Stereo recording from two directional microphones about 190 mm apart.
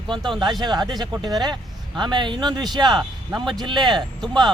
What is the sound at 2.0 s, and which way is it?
Speech, 25° right (ahead or behind).